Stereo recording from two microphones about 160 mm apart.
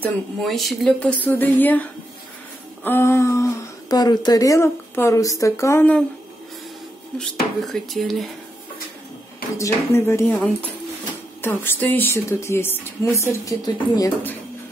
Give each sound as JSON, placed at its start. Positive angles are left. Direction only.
{"t": 0.0, "sound": "speech", "side_deg": 0}
{"t": 7.6, "sound": "speech", "side_deg": 0}
{"t": 9.6, "sound": "speech", "side_deg": 15}